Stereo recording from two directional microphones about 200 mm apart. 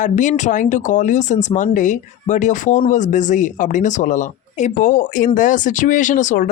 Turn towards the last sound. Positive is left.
turn(degrees=40)  # may be behind; listen again after turning